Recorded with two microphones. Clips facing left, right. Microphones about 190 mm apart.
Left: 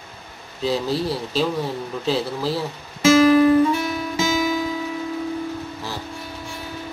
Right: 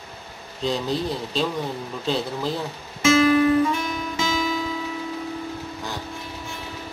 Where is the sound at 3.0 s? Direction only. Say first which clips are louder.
Left 4 dB; 35° left (ahead or behind).